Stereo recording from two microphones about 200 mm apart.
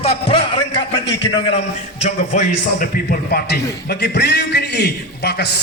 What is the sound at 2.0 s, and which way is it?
A man's voice, 35° left (ahead or behind).